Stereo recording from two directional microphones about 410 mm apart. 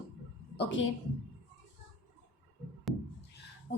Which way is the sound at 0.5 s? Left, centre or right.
Left.